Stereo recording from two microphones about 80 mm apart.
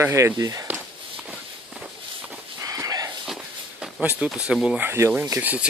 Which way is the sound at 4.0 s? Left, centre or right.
Centre.